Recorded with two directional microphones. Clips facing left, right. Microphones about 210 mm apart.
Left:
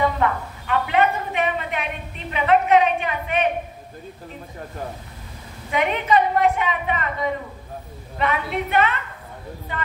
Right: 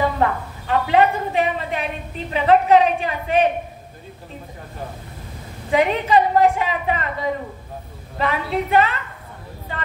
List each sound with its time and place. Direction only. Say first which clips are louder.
0.2 s a woman's voice: right 2 dB; 35° right (ahead or behind)
5.7 s a woman's voice: right 3 dB; 35° right (ahead or behind)